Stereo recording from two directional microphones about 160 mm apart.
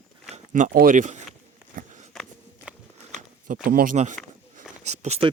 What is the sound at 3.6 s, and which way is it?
Speech, 60° right (ahead or behind).